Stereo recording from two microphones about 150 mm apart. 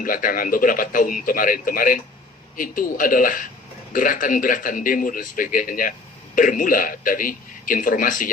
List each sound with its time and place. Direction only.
0.0 s a man's voice: 70° left (ahead or behind)